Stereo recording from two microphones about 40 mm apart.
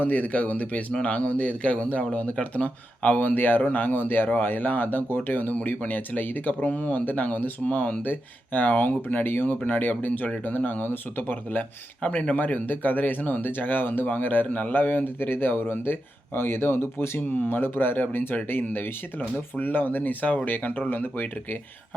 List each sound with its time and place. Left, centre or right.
0.0 s a man's voice: left
5.5 s speech: left
6.5 s speech: left
8.0 s speech: left
14.4 s a man's voice: left
14.7 s speech: left
17.2 s speech: left